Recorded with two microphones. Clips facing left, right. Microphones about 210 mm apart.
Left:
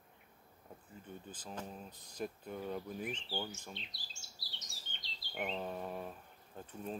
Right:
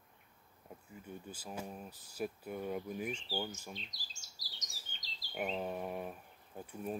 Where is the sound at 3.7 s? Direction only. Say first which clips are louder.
Right 1 dB; 40° right (ahead or behind).